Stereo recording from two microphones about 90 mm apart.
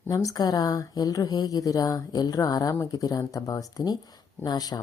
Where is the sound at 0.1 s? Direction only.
40° left (ahead or behind).